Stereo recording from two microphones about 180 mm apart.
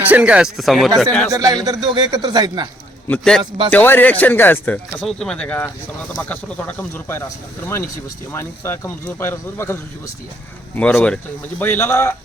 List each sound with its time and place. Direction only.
0.0 s speech: 10° right (ahead or behind)
1.3 s a man's voice: 20° right (ahead or behind)
3.1 s speech: 5° left (ahead or behind)
10.8 s speech: 5° left (ahead or behind)